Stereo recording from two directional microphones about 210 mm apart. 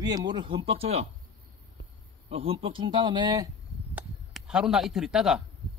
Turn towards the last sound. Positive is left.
turn(degrees=0)  # may be behind; listen again after turning